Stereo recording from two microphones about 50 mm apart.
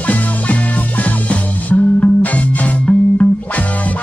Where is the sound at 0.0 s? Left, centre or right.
Left.